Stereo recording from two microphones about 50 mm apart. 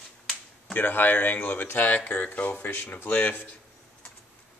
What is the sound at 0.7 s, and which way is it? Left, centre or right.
Speech, left.